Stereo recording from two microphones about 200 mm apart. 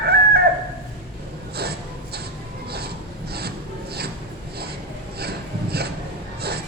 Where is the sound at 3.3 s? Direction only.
55° right (ahead or behind).